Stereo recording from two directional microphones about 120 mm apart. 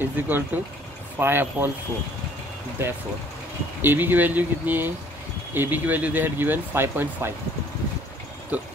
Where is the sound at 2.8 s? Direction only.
20° right (ahead or behind).